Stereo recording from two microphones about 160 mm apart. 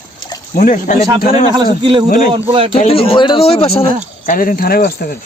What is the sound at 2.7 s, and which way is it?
Speech, 40° left (ahead or behind).